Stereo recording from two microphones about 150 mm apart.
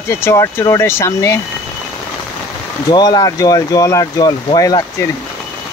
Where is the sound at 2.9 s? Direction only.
25° left (ahead or behind).